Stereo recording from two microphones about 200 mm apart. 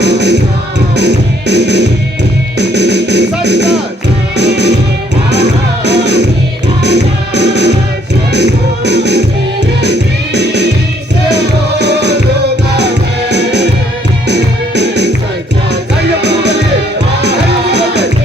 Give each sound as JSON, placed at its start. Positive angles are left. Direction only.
{"t": 0.0, "sound": "music", "side_deg": -60}
{"t": 10.3, "sound": "music", "side_deg": -60}
{"t": 14.8, "sound": "music", "side_deg": -60}
{"t": 16.2, "sound": "music", "side_deg": -60}